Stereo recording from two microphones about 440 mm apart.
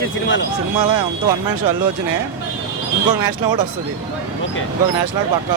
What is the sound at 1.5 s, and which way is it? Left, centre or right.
Speech, right.